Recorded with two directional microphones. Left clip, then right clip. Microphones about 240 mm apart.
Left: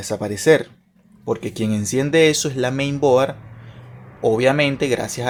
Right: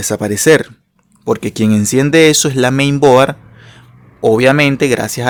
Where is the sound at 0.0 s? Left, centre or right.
Right.